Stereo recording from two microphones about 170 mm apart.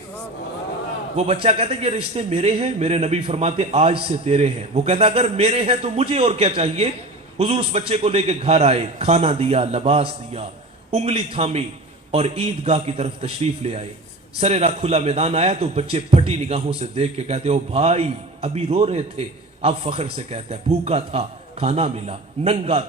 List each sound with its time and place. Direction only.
1.1 s a man's voice: 35° right (ahead or behind)